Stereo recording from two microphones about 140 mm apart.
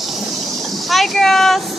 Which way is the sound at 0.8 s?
Centre (ahead or behind).